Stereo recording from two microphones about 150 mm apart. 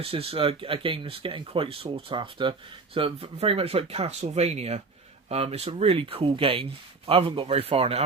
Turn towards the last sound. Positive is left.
turn(degrees=-40)  # may be behind; listen again after turning